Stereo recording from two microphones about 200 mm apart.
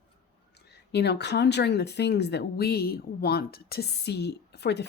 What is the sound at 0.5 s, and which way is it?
Speech, 55° left (ahead or behind).